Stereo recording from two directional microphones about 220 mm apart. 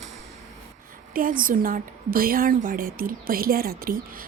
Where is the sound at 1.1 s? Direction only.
40° right (ahead or behind).